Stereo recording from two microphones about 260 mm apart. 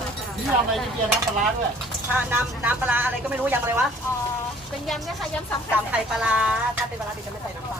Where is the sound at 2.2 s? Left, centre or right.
Centre.